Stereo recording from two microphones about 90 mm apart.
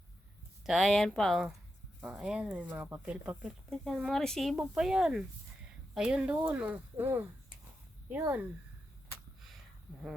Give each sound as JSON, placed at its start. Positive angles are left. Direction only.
{"t": 0.6, "sound": "speech", "side_deg": 0}
{"t": 2.1, "sound": "speech", "side_deg": -10}
{"t": 3.7, "sound": "speech", "side_deg": 0}
{"t": 4.5, "sound": "speech", "side_deg": -10}